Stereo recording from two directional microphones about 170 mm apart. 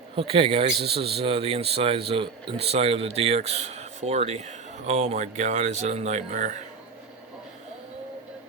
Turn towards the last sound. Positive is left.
turn(degrees=-50)  # may be behind; listen again after turning